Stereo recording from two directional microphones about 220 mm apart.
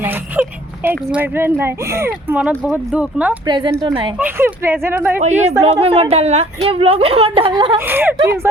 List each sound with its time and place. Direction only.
0.0 s whimper: 10° right (ahead or behind)
1.0 s speech: 5° right (ahead or behind)
3.4 s a woman's voice: 20° right (ahead or behind)
4.2 s speech: 10° right (ahead or behind)
5.1 s a woman's voice: 30° right (ahead or behind)
7.8 s speech: 10° right (ahead or behind)